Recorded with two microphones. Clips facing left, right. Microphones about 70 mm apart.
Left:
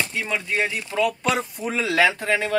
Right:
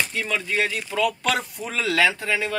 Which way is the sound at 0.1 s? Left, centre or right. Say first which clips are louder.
Even; centre.